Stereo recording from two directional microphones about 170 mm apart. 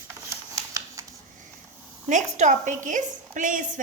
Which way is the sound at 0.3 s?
20° right (ahead or behind).